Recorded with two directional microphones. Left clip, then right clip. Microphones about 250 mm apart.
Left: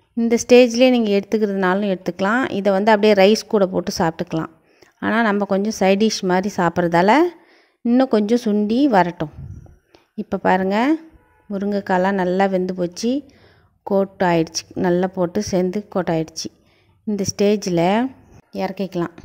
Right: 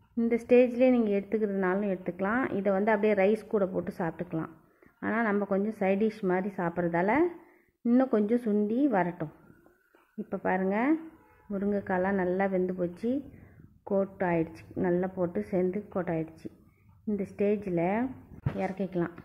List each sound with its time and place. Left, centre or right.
0.3 s a woman's voice: left
18.6 s a woman's voice: left